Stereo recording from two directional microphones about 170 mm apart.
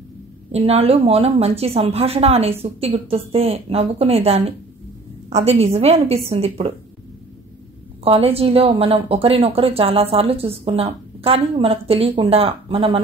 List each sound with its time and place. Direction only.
0.5 s a woman's voice: 35° right (ahead or behind)
8.0 s a woman's voice: 35° right (ahead or behind)